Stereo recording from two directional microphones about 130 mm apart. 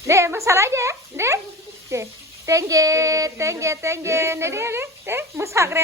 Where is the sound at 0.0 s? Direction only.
20° right (ahead or behind).